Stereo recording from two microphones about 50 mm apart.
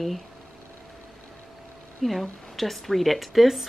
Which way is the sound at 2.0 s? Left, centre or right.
Centre.